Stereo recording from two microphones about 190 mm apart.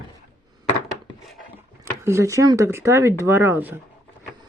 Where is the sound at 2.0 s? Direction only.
15° right (ahead or behind).